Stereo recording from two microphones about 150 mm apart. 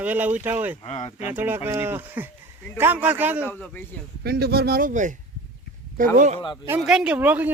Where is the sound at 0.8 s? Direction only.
45° left (ahead or behind).